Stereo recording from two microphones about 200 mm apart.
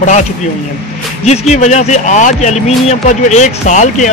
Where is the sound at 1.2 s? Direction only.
35° left (ahead or behind).